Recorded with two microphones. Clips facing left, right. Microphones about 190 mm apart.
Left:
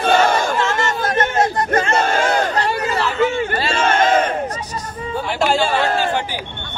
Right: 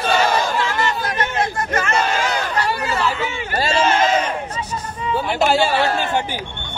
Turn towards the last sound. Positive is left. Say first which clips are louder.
# left 1 dB
turn(degrees=50)  # may be behind; listen again after turning